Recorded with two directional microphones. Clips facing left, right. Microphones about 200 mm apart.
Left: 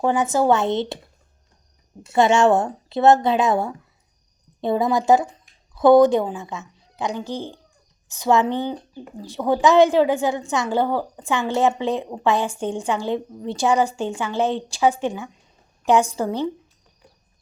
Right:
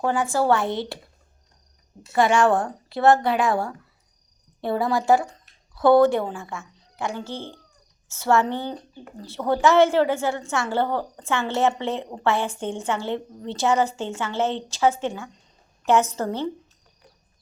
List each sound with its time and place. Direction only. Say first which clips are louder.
0.0 s speech: left 3 dB; 20° left (ahead or behind)
2.1 s speech: left 3 dB; 25° left (ahead or behind)